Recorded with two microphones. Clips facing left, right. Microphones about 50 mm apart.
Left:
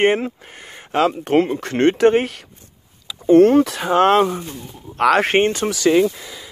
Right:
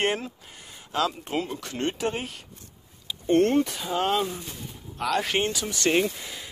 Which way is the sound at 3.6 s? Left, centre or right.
Left.